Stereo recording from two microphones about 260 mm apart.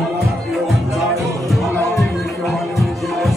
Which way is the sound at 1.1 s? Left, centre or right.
Centre.